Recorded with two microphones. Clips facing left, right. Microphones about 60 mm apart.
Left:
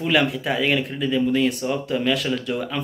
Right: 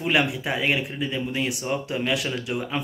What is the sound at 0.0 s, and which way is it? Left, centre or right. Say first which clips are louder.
Speech: left 2 dB; centre.